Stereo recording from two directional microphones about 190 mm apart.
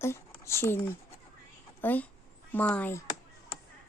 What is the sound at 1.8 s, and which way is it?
Speech, 10° left (ahead or behind).